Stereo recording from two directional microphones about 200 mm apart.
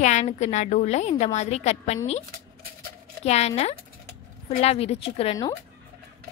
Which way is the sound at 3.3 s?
35° left (ahead or behind).